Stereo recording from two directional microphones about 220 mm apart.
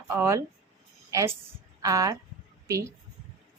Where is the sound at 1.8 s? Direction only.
15° right (ahead or behind).